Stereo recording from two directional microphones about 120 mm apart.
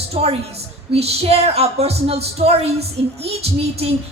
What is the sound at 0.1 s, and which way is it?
A woman's voice, 60° right (ahead or behind).